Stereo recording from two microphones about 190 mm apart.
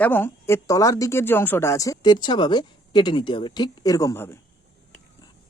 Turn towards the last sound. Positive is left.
turn(degrees=15)  # may be behind; listen again after turning